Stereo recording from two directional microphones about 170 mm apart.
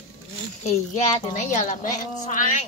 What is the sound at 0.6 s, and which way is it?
A woman's voice, 40° left (ahead or behind).